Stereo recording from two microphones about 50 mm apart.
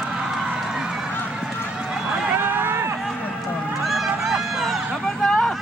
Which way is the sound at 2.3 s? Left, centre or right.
Right.